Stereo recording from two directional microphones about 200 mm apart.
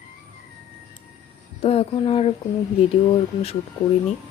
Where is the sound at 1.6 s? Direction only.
30° left (ahead or behind).